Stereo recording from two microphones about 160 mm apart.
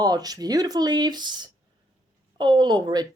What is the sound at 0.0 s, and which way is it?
Speech, 25° right (ahead or behind).